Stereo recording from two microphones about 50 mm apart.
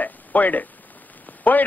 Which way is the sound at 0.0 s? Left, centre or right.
Left.